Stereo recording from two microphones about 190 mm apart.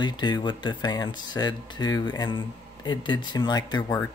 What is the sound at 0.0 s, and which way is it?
Speech, 25° left (ahead or behind).